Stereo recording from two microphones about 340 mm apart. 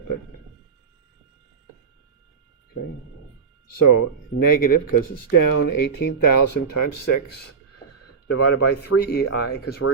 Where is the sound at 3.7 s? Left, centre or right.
Left.